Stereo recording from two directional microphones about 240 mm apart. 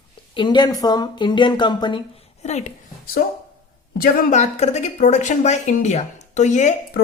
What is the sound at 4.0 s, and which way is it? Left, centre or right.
A woman's voice, left.